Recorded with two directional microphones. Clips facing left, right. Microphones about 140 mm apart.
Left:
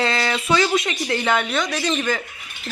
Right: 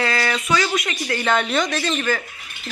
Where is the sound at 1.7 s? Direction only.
15° left (ahead or behind).